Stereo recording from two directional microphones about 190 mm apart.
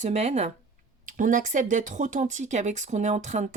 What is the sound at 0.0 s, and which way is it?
A woman's voice, 35° right (ahead or behind).